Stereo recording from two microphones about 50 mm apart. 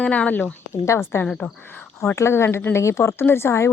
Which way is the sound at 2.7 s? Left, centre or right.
Left.